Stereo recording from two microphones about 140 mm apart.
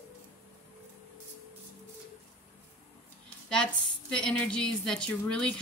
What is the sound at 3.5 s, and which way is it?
Speech, 5° left (ahead or behind).